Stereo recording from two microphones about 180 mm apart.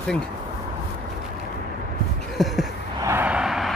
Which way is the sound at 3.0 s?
10° right (ahead or behind).